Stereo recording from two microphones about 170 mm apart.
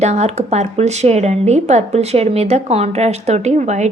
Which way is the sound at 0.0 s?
40° right (ahead or behind).